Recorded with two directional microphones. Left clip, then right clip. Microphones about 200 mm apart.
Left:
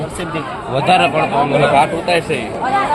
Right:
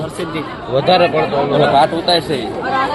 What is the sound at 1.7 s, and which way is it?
Speech, 25° right (ahead or behind).